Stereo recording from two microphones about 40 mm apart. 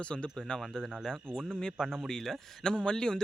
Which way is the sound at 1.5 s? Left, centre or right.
Centre.